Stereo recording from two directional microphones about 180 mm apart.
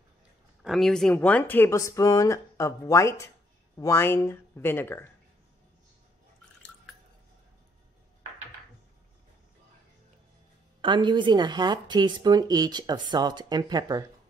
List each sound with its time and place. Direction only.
0.6 s speech: centre (ahead or behind)
10.8 s speech: 25° right (ahead or behind)